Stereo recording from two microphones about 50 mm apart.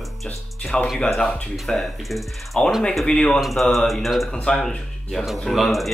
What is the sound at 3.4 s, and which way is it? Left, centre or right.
Speech, centre.